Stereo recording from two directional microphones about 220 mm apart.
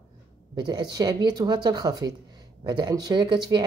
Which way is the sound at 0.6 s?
20° right (ahead or behind).